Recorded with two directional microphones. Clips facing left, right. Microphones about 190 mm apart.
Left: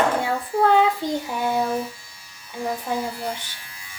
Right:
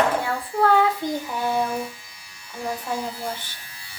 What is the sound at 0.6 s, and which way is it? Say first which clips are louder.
Speech: left 1 dB; 20° left (ahead or behind).